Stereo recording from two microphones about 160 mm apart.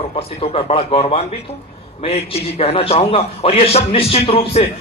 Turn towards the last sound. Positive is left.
turn(degrees=35)  # may be behind; listen again after turning